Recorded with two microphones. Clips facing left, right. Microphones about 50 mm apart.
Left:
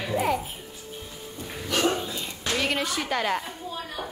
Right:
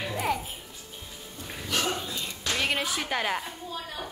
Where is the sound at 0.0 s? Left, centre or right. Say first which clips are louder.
Left 4 dB; centre.